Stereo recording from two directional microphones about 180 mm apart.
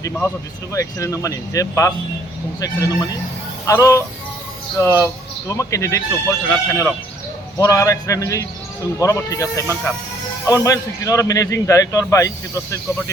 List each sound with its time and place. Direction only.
0.7 s a man's voice: 15° left (ahead or behind)
5.0 s a man's voice: 15° left (ahead or behind)